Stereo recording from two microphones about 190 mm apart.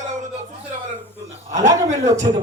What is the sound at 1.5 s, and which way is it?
Speech, 40° right (ahead or behind).